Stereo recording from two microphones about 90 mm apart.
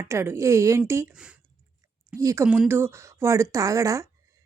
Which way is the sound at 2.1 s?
35° right (ahead or behind).